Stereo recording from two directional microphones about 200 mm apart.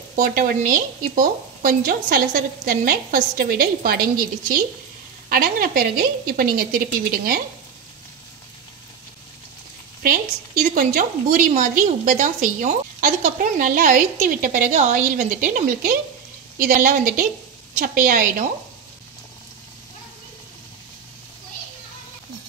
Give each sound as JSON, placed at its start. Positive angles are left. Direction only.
{"t": 0.1, "sound": "a woman's voice", "side_deg": -45}
{"t": 10.7, "sound": "a woman's voice", "side_deg": -45}